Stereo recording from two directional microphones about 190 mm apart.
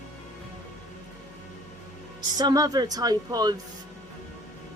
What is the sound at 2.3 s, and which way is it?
A woman's voice, 20° right (ahead or behind).